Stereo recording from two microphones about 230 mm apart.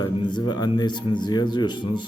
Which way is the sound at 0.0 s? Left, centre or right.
Centre.